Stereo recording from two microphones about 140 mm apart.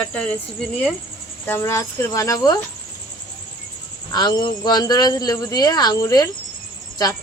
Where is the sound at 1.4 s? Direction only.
20° left (ahead or behind).